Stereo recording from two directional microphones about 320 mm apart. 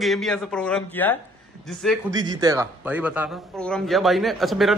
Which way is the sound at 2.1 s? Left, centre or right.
Centre.